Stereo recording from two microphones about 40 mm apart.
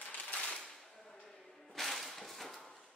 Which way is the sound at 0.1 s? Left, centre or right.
Left.